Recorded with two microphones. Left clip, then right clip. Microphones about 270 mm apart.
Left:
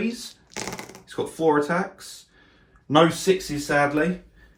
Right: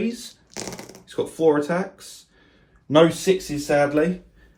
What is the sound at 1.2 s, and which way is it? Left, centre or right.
Speech, centre.